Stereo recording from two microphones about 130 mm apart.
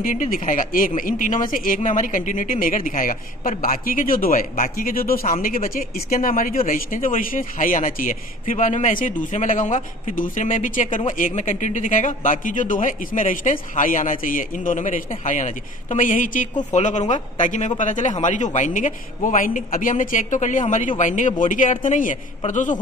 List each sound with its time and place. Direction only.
0.0 s a man's voice: 90° left
16.7 s a man's voice: 65° left (ahead or behind)